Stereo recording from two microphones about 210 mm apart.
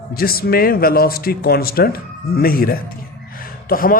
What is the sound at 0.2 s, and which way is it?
A man's voice, 45° left (ahead or behind).